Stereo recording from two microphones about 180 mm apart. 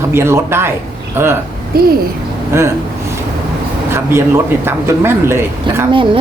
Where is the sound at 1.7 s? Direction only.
60° right (ahead or behind).